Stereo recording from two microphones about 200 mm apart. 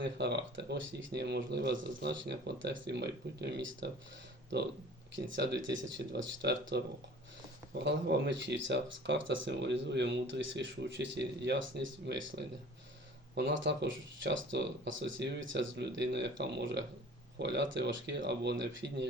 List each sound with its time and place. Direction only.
0.2 s speech: 60° right (ahead or behind)
5.1 s speech: 60° right (ahead or behind)